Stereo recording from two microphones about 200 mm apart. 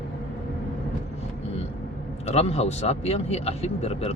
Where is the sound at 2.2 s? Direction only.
30° left (ahead or behind).